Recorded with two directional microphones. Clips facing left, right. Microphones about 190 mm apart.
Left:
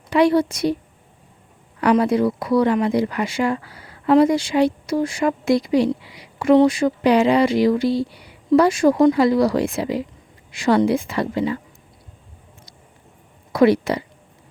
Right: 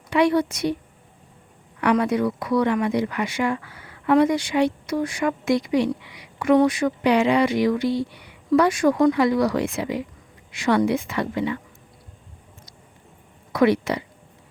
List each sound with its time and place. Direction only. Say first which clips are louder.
0.1 s speech: left 3 dB; 35° left (ahead or behind)
1.8 s speech: left 3 dB; 35° left (ahead or behind)
13.5 s speech: left 3 dB; 35° left (ahead or behind)